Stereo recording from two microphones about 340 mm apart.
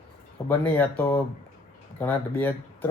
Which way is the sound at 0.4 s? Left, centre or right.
Centre.